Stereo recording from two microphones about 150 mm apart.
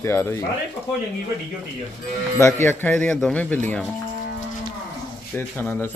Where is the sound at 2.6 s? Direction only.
10° left (ahead or behind).